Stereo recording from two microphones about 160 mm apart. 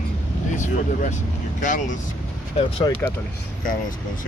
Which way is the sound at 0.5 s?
50° left (ahead or behind).